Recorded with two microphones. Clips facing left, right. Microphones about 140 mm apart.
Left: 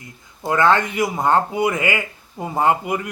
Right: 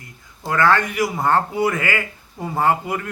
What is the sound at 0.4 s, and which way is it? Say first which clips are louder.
A man's voice: left 1 dB; 20° left (ahead or behind).